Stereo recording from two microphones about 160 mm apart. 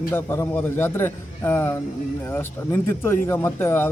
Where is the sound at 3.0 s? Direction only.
15° left (ahead or behind).